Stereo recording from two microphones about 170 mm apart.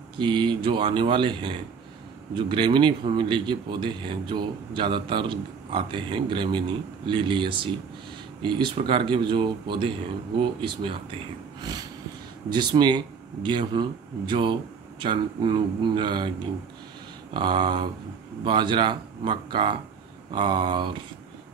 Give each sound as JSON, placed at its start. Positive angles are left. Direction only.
{"t": 0.2, "sound": "a man's voice", "side_deg": -25}
{"t": 12.4, "sound": "a man's voice", "side_deg": -25}
{"t": 17.3, "sound": "a man's voice", "side_deg": -25}